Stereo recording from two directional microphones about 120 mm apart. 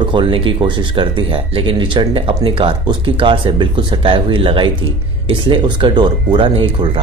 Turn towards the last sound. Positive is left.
turn(degrees=-45)  # may be behind; listen again after turning